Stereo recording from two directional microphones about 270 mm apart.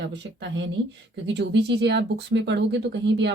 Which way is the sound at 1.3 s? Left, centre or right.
Right.